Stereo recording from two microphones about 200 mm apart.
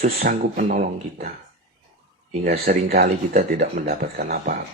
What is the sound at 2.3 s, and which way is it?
Speech, 40° right (ahead or behind).